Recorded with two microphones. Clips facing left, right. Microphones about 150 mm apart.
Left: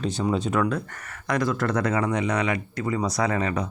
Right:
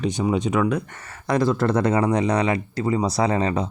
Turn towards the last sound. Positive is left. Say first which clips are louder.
# right 4 dB
turn(degrees=-30)  # may be behind; listen again after turning